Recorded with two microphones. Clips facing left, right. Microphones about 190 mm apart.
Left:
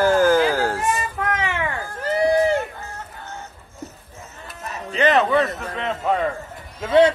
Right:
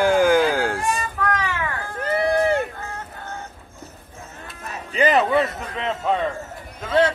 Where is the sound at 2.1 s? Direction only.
55° right (ahead or behind).